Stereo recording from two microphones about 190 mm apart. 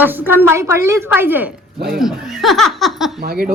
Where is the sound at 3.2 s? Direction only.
55° right (ahead or behind).